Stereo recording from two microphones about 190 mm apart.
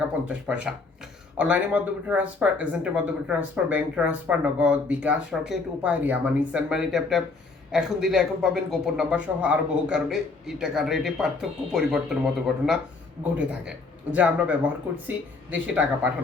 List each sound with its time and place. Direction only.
0.3 s a man's voice: 5° right (ahead or behind)